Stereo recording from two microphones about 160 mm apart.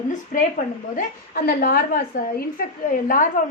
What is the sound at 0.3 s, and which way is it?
A woman's voice, 55° left (ahead or behind).